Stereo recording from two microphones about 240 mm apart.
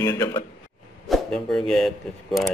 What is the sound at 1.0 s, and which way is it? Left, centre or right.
Speech, centre.